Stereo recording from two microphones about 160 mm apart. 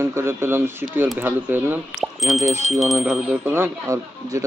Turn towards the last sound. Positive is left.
turn(degrees=-20)  # may be behind; listen again after turning